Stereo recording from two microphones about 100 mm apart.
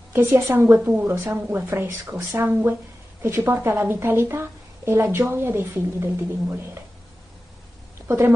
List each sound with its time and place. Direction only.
0.1 s a woman's voice: 30° right (ahead or behind)